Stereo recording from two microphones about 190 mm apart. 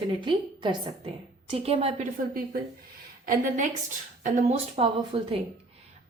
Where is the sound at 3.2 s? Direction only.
40° right (ahead or behind).